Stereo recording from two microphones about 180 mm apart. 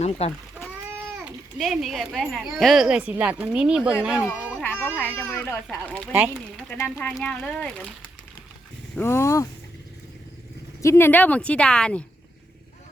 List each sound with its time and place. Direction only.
0.0 s speech: 35° left (ahead or behind)
1.2 s speech: centre (ahead or behind)
4.6 s a sound: 10° left (ahead or behind)
4.9 s a woman's voice: 10° left (ahead or behind)
6.1 s speech: 10° right (ahead or behind)
6.7 s a woman's voice: 10° left (ahead or behind)
9.0 s a woman's voice: 15° left (ahead or behind)
10.8 s a woman's voice: 15° left (ahead or behind)